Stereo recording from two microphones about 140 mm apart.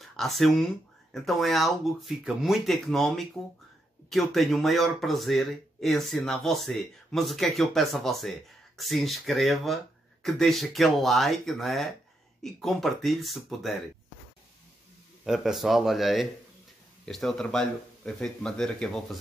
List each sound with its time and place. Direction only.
0.0 s speech: centre (ahead or behind)
15.2 s speech: centre (ahead or behind)